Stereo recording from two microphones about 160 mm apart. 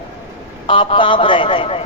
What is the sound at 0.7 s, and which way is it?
A man's voice, 30° left (ahead or behind).